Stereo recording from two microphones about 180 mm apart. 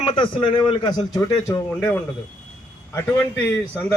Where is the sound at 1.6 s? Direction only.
10° left (ahead or behind).